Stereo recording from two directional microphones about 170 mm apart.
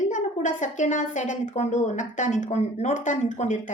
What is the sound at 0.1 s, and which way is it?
A woman's voice, 50° left (ahead or behind).